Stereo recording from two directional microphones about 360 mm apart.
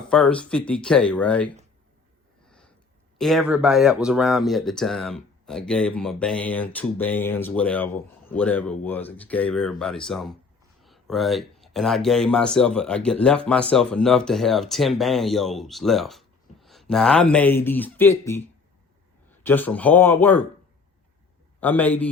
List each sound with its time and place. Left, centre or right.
0.1 s speech: centre
2.5 s a sound: centre
3.2 s speech: centre
21.6 s speech: centre